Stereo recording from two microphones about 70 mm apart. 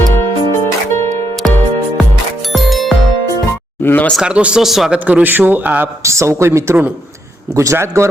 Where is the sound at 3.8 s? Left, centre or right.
Left.